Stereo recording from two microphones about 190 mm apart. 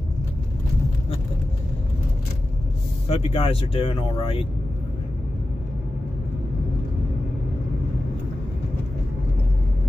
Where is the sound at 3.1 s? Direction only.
30° left (ahead or behind).